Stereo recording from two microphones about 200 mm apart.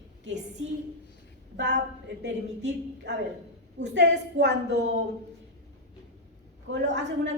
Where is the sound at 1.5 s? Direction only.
60° right (ahead or behind).